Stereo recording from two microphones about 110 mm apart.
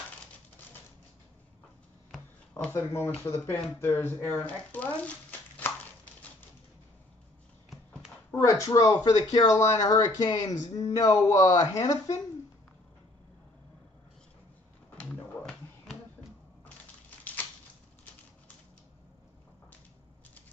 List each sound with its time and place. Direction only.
2.5 s speech: 20° left (ahead or behind)
8.3 s speech: 25° left (ahead or behind)
15.0 s a sound: 15° left (ahead or behind)